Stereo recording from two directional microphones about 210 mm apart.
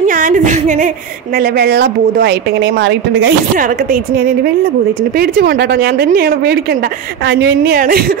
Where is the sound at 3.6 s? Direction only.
40° right (ahead or behind).